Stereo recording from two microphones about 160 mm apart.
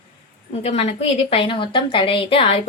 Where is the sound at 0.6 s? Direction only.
40° left (ahead or behind).